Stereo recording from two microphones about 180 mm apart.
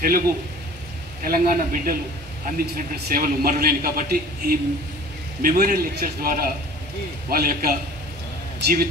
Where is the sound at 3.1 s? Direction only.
55° right (ahead or behind).